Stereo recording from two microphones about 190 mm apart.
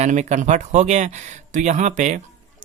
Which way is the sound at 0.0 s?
35° right (ahead or behind).